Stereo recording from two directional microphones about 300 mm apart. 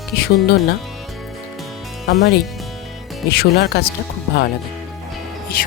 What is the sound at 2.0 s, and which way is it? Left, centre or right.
Speech, left.